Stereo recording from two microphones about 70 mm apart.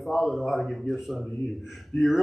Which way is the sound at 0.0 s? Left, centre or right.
Centre.